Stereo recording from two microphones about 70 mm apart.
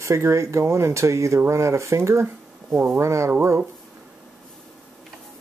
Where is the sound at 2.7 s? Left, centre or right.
Right.